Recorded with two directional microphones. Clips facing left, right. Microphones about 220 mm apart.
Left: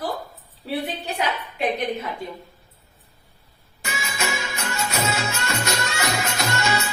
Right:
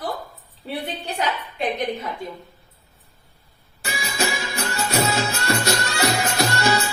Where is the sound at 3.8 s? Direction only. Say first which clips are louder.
Right 3 dB; 35° right (ahead or behind).